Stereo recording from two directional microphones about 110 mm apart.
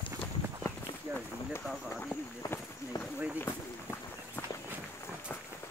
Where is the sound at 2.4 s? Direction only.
30° left (ahead or behind).